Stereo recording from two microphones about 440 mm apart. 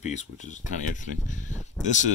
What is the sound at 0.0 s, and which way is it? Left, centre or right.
Speech, centre.